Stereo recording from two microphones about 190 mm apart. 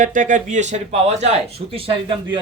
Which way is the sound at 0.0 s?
45° right (ahead or behind).